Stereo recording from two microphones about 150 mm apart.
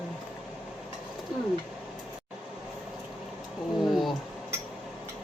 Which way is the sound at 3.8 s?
Centre (ahead or behind).